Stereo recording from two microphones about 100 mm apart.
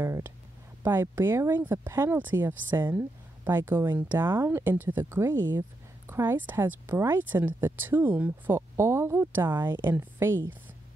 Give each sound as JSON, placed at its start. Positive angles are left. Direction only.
{"t": 0.0, "sound": "a sound", "side_deg": -25}
{"t": 0.8, "sound": "speech", "side_deg": -25}
{"t": 8.5, "sound": "speech", "side_deg": -30}